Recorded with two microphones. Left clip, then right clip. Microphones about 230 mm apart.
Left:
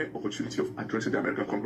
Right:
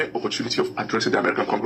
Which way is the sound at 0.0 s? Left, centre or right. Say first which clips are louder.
Right 8 dB; right.